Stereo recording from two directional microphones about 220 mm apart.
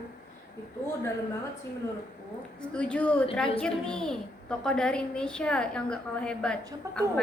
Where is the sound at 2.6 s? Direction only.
5° left (ahead or behind).